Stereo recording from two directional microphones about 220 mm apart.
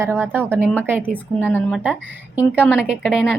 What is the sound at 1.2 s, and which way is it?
A woman's voice, 10° left (ahead or behind).